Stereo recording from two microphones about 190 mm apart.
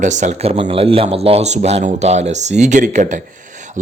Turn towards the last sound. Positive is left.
turn(degrees=-40)  # may be behind; listen again after turning